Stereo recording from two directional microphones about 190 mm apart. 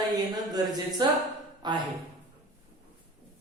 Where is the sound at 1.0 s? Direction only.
20° right (ahead or behind).